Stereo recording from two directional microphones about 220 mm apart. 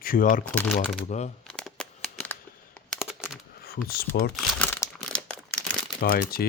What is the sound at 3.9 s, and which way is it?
Speech, 45° left (ahead or behind).